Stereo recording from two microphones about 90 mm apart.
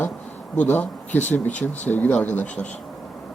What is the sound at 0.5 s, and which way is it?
Speech, 15° left (ahead or behind).